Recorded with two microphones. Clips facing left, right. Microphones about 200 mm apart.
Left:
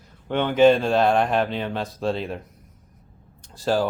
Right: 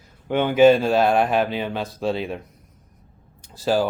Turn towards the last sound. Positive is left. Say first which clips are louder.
# right 1 dB
turn(degrees=0)  # may be behind; listen again after turning